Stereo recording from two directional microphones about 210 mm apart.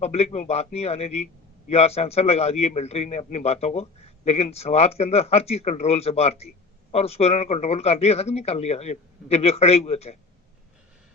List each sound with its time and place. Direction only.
0.0 s a man's voice: 30° left (ahead or behind)